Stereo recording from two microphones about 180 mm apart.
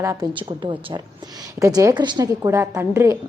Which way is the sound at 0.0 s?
15° right (ahead or behind).